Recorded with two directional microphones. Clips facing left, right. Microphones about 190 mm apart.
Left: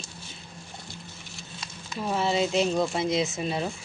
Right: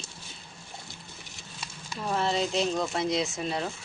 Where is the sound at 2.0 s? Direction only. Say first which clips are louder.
Left 2 dB; 5° left (ahead or behind).